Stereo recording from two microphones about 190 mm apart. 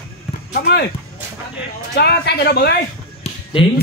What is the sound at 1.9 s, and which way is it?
Speech, 60° left (ahead or behind).